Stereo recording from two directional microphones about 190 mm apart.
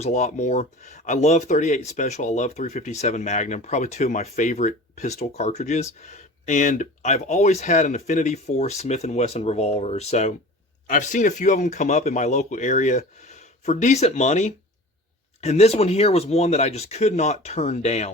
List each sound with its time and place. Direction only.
0.0 s speech: 40° left (ahead or behind)